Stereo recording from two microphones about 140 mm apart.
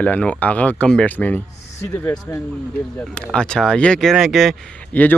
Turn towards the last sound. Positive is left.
turn(degrees=10)  # may be behind; listen again after turning